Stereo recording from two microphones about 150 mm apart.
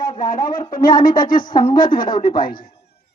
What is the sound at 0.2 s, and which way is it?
Speech, 65° left (ahead or behind).